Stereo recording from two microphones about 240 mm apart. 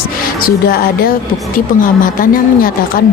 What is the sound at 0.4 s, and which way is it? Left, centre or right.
Speech, left.